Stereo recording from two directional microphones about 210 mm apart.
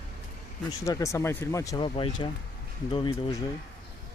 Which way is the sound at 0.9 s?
15° left (ahead or behind).